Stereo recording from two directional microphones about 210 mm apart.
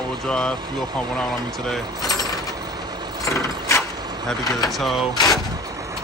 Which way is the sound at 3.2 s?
15° left (ahead or behind).